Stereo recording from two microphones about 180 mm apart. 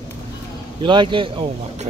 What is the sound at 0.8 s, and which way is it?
Speech, 25° right (ahead or behind).